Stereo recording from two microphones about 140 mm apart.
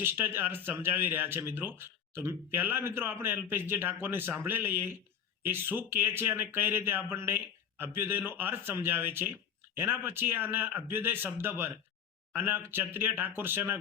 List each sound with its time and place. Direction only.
0.0 s speech: 15° right (ahead or behind)